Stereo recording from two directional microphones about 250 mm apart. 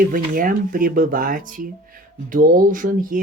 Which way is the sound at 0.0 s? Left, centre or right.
Right.